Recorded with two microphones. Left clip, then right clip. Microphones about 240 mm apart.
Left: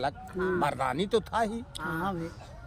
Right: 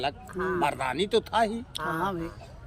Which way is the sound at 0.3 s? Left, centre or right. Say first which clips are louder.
Even; centre.